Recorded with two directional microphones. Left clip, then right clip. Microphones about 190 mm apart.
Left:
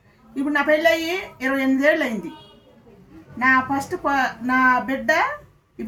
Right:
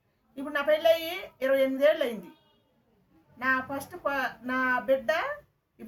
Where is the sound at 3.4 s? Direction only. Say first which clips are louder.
Left 10 dB; 15° right (ahead or behind).